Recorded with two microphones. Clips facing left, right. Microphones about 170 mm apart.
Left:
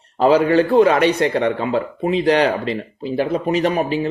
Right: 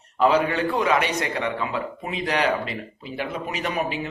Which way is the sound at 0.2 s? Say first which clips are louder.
Left 6 dB; 35° left (ahead or behind).